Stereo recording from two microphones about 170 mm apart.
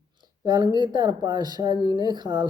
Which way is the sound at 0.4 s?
25° right (ahead or behind).